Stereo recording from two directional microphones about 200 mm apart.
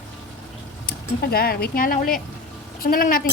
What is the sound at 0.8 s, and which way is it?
A woman's voice, 50° left (ahead or behind).